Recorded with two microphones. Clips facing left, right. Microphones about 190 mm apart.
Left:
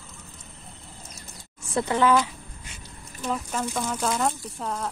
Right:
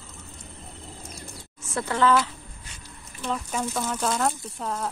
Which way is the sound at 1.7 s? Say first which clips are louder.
Left 1 dB; 15° left (ahead or behind).